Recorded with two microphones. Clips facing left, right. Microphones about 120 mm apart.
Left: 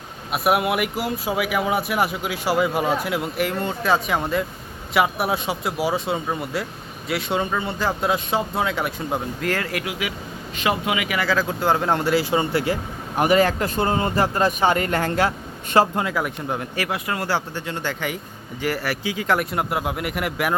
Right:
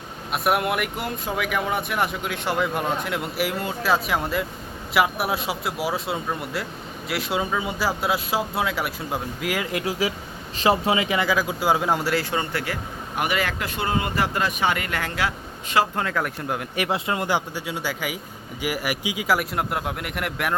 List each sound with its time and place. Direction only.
0.3 s speech: centre (ahead or behind); by 9.8 s 15° right (ahead or behind)
9.8 s a man's voice: 35° right (ahead or behind)
11.3 s speech: 10° right (ahead or behind)
12.3 s speech: 20° left (ahead or behind)
13.1 s speech: 35° left (ahead or behind)
16.0 s speech: 15° left (ahead or behind)
16.2 s speech: 5° right (ahead or behind)
16.7 s speech: 20° right (ahead or behind); by 20.6 s centre (ahead or behind)